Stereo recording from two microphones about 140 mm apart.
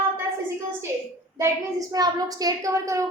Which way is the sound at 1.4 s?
25° right (ahead or behind).